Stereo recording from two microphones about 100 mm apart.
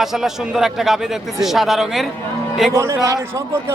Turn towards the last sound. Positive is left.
turn(degrees=-35)  # may be behind; listen again after turning